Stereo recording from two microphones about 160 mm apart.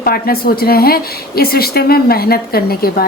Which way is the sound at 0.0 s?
70° left (ahead or behind).